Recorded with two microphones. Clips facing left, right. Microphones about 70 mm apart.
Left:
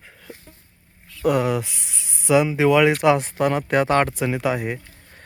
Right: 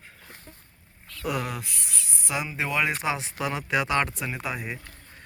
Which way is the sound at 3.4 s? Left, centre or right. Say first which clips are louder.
Left 8 dB; left.